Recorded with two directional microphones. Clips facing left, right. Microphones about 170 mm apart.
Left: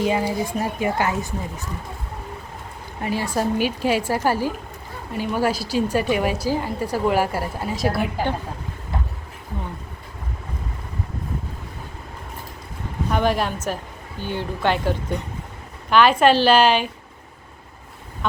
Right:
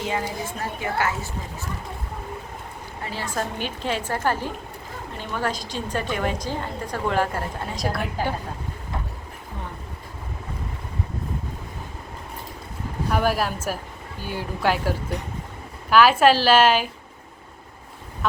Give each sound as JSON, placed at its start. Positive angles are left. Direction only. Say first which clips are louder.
{"t": 0.0, "sound": "a woman's voice", "louder": "left 6 dB", "side_deg": 15}
{"t": 3.0, "sound": "a woman's voice", "louder": "left 6 dB", "side_deg": 15}
{"t": 13.1, "sound": "a woman's voice", "louder": "left 2 dB", "side_deg": -5}